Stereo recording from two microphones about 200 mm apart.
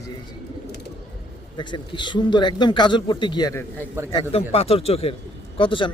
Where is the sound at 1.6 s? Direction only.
25° left (ahead or behind).